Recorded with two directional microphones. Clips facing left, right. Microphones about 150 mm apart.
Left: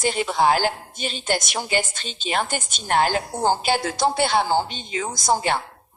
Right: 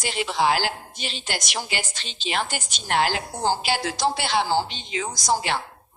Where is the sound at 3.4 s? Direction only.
50° left (ahead or behind).